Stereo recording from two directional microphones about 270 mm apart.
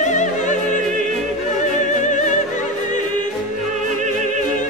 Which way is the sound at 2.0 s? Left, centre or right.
Left.